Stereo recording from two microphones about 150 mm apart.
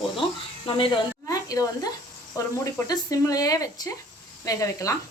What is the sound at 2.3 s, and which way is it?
Speech, 25° left (ahead or behind).